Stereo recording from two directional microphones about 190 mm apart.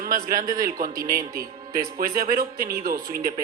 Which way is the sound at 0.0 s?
45° right (ahead or behind).